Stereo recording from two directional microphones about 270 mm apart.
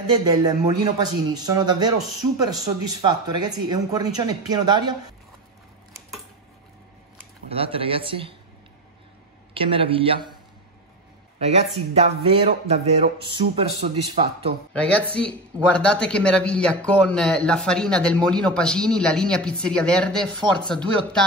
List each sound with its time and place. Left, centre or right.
0.1 s speech: centre
2.0 s speech: centre
2.9 s speech: centre
5.9 s cutlery: centre
7.2 s speech: right
9.5 s speech: centre
11.3 s speech: right
14.7 s speech: centre